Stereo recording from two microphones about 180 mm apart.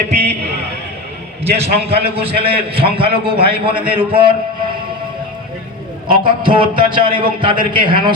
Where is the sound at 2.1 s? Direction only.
30° right (ahead or behind).